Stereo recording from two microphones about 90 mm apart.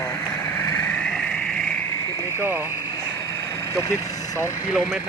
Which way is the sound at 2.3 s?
25° right (ahead or behind).